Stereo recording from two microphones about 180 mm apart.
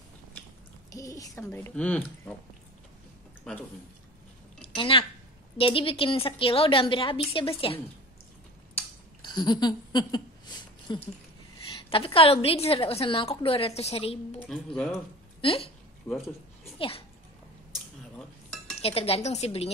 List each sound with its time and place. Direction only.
0.9 s speech: 20° left (ahead or behind)
3.5 s speech: 5° left (ahead or behind)
4.6 s a sound: 30° left (ahead or behind)
5.6 s a woman's voice: 30° left (ahead or behind)
9.2 s a sound: 25° left (ahead or behind)
11.9 s a woman's voice: 30° left (ahead or behind)
15.4 s a woman's voice: 30° left (ahead or behind)
16.1 s speech: 15° left (ahead or behind)
16.7 s a child's voice: 30° left (ahead or behind)
18.1 s cutlery: 5° left (ahead or behind)
18.8 s a woman's voice: 35° left (ahead or behind)